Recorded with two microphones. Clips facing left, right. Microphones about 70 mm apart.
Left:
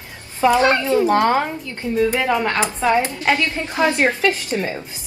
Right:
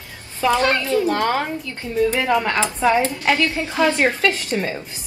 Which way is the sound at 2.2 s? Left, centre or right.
Centre.